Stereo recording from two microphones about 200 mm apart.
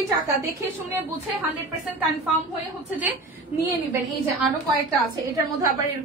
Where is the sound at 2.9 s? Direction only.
10° right (ahead or behind).